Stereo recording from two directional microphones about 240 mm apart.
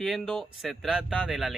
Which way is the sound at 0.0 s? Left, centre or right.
Centre.